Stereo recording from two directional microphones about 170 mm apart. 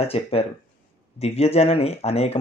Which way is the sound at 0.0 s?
35° left (ahead or behind).